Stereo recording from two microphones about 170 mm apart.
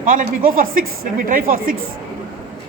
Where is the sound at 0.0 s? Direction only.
50° right (ahead or behind).